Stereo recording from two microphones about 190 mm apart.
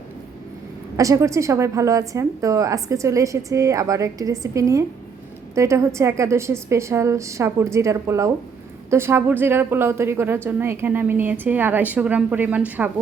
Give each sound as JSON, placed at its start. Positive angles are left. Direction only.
{"t": 0.9, "sound": "a woman's voice", "side_deg": -15}